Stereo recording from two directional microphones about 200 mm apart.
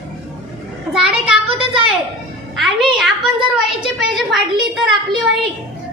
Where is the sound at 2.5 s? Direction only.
Centre (ahead or behind).